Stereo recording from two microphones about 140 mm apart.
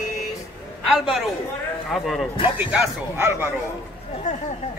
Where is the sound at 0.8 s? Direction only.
Centre (ahead or behind).